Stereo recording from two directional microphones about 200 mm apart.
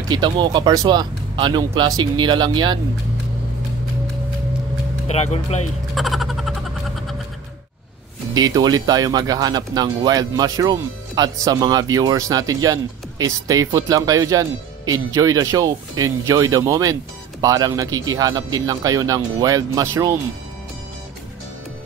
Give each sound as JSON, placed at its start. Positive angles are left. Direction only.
{"t": 0.1, "sound": "speech", "side_deg": -20}
{"t": 5.0, "sound": "speech", "side_deg": 35}
{"t": 5.9, "sound": "a sound", "side_deg": 0}
{"t": 8.4, "sound": "speech", "side_deg": -20}